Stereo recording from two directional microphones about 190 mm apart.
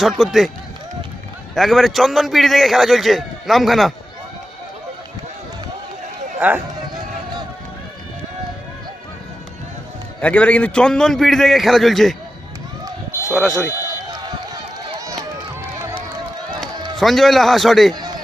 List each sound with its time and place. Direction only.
0.0 s a man's voice: centre (ahead or behind)
1.5 s a man's voice: centre (ahead or behind)
6.4 s speech: 10° right (ahead or behind)
10.2 s a man's voice: 5° left (ahead or behind)
12.8 s run: 15° right (ahead or behind)
13.3 s a man's voice: centre (ahead or behind)
14.1 s run: 20° right (ahead or behind)
17.0 s a man's voice: centre (ahead or behind)
17.9 s a sound: 20° right (ahead or behind)